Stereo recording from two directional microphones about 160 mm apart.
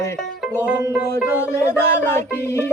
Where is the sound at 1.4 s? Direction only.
15° left (ahead or behind).